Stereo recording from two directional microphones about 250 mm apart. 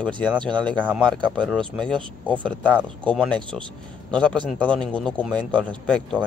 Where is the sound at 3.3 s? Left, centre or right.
Centre.